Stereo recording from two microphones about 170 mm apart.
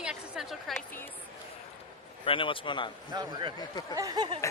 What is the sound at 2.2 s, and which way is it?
Speech, 30° left (ahead or behind).